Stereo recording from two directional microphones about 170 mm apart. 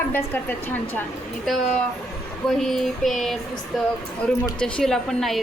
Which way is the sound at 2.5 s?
Centre (ahead or behind).